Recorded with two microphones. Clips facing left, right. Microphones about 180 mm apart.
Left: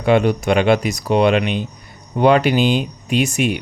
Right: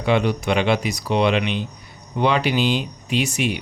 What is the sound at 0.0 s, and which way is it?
Speech, 50° left (ahead or behind).